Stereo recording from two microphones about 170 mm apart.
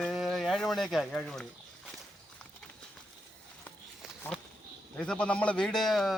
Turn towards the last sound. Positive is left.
turn(degrees=0)  # may be behind; listen again after turning